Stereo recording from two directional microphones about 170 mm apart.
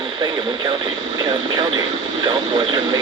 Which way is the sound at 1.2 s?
30° right (ahead or behind).